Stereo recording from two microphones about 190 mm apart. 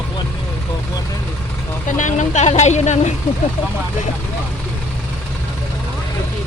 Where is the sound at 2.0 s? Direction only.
40° left (ahead or behind).